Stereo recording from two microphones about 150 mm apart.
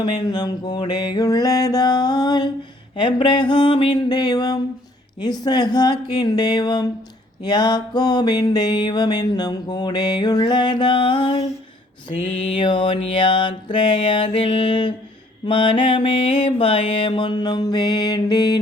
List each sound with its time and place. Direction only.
0.0 s music: 30° left (ahead or behind)
2.9 s mantra: 35° left (ahead or behind)
5.2 s music: 25° left (ahead or behind)
12.1 s mantra: 45° left (ahead or behind); by 18.6 s 25° left (ahead or behind)